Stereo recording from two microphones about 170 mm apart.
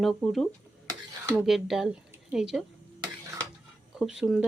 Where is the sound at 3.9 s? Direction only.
5° right (ahead or behind).